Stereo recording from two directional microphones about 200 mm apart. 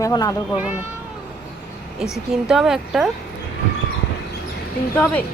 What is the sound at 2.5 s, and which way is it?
Speech, 5° right (ahead or behind).